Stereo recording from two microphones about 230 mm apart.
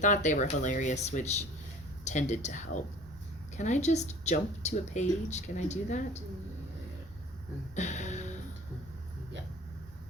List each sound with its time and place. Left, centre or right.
0.0 s speech: left
7.8 s music: left